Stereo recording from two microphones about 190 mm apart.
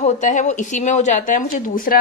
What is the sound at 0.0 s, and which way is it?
A woman's voice, 40° left (ahead or behind).